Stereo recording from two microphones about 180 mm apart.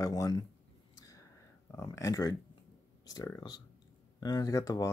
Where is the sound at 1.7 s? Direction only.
15° left (ahead or behind).